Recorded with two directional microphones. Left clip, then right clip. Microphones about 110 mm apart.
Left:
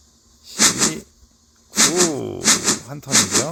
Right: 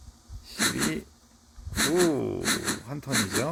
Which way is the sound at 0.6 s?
15° left (ahead or behind).